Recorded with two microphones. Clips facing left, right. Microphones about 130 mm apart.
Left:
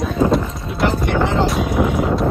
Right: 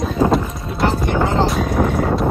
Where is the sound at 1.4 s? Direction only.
Centre (ahead or behind).